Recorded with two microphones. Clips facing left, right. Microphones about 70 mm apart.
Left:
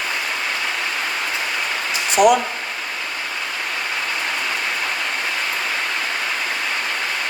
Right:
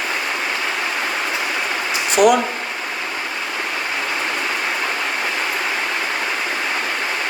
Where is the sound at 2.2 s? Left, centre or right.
Centre.